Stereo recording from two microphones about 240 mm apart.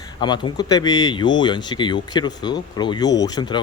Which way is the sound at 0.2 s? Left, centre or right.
Centre.